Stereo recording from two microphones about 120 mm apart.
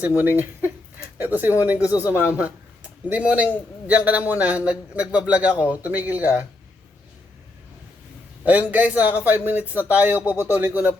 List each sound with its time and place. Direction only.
0.2 s speech: 15° right (ahead or behind)
8.4 s speech: 15° right (ahead or behind)